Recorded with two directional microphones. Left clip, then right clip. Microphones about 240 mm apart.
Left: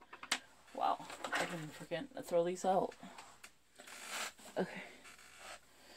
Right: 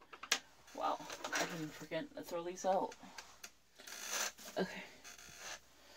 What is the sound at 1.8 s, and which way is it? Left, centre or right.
Speech, left.